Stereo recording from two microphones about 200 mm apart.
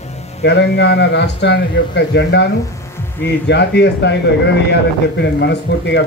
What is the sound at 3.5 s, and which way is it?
A man's voice, 60° left (ahead or behind).